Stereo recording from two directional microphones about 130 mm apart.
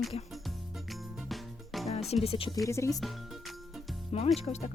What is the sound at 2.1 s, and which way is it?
Speech, 50° left (ahead or behind).